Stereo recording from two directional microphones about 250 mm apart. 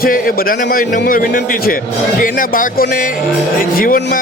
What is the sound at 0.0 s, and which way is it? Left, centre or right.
Speech, left.